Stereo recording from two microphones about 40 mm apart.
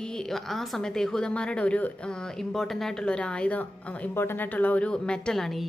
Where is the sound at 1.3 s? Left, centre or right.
Left; by 3.0 s centre.